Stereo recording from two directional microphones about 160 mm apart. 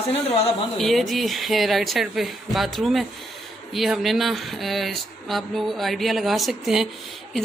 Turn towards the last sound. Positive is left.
turn(degrees=0)  # may be behind; listen again after turning